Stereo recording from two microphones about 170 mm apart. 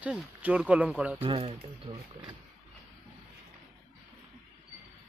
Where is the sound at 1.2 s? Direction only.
35° right (ahead or behind).